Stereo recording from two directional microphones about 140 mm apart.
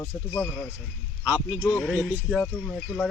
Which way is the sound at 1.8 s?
Centre (ahead or behind).